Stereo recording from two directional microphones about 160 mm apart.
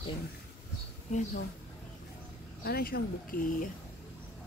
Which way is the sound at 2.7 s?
75° left (ahead or behind).